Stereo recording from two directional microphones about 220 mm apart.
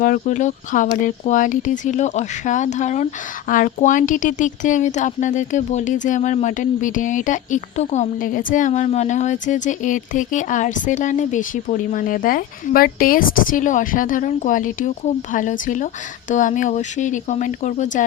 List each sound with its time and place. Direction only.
0.0 s speech: 35° left (ahead or behind)